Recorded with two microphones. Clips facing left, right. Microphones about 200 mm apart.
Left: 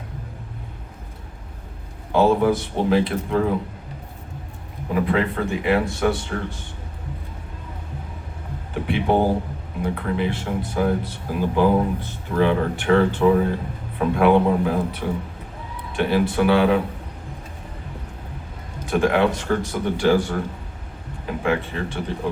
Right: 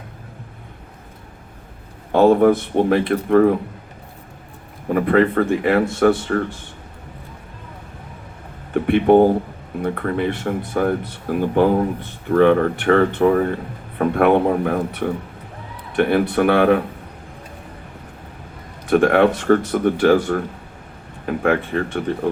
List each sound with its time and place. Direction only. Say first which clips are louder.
2.1 s speech: right 5 dB; 60° right (ahead or behind)
4.9 s speech: right 6 dB; 55° right (ahead or behind)
8.7 s speech: right 8 dB; 55° right (ahead or behind)
18.9 s speech: right 5 dB; 55° right (ahead or behind)